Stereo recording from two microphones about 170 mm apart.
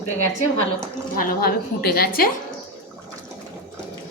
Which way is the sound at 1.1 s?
60° left (ahead or behind).